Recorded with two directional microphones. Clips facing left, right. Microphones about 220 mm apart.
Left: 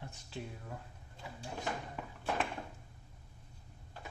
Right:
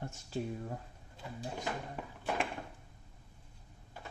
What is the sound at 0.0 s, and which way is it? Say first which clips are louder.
Speech: right 7 dB; 45° right (ahead or behind).